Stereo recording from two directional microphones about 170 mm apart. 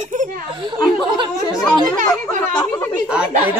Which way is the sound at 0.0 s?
45° right (ahead or behind).